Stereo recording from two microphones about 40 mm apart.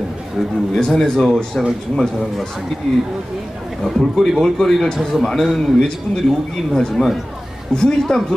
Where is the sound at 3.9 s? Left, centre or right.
Centre.